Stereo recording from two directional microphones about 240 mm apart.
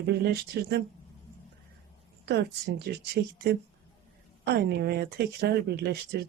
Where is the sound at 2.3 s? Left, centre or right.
Right.